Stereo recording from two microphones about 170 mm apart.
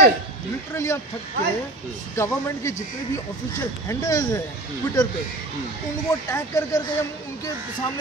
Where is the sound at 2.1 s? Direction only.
15° left (ahead or behind).